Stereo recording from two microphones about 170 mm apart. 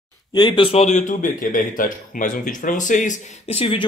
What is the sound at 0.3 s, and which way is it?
Speech, 25° left (ahead or behind).